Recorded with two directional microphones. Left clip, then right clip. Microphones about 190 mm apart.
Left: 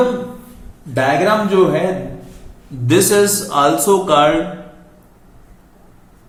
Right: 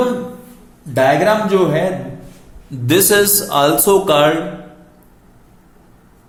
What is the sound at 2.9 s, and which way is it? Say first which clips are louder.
Speech: even; 50° right (ahead or behind).